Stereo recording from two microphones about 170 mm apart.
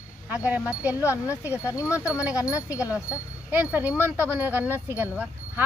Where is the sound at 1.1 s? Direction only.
15° left (ahead or behind).